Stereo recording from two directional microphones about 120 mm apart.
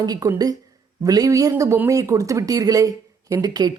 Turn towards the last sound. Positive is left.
turn(degrees=-35)  # may be behind; listen again after turning